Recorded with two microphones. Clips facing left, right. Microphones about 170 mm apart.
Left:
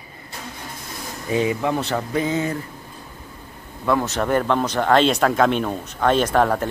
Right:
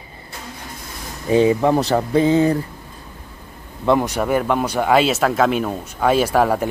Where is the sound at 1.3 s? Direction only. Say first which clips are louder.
Right 6 dB; 30° right (ahead or behind).